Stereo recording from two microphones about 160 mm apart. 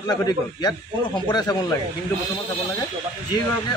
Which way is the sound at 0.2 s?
25° left (ahead or behind).